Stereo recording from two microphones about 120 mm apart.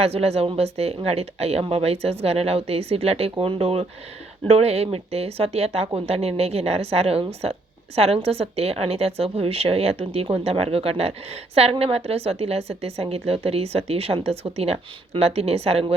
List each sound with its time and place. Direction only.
0.0 s a woman's voice: 60° right (ahead or behind)